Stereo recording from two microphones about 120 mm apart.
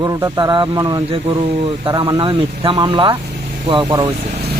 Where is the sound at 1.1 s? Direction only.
50° right (ahead or behind).